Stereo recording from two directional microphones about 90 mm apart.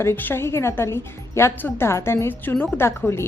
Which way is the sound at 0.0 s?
25° left (ahead or behind).